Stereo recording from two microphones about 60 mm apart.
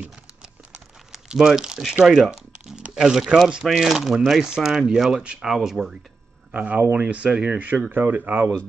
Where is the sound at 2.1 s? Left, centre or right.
Centre.